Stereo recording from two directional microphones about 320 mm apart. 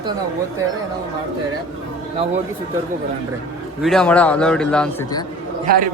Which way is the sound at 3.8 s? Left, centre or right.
Centre.